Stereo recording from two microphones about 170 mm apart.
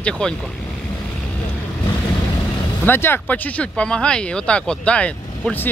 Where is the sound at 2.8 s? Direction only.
15° left (ahead or behind).